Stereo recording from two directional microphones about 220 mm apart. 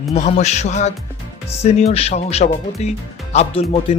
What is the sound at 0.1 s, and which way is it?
Speech, 30° left (ahead or behind).